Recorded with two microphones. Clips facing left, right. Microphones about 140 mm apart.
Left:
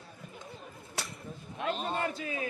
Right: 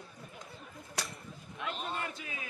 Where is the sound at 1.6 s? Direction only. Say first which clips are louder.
Left 6 dB; 35° left (ahead or behind).